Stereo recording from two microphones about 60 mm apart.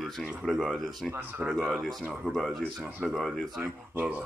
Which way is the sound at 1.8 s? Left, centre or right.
Centre.